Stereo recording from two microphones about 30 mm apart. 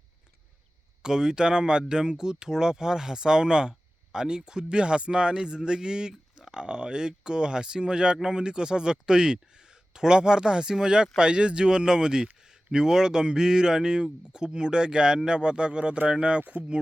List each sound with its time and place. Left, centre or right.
1.0 s speech: right
16.4 s speech: right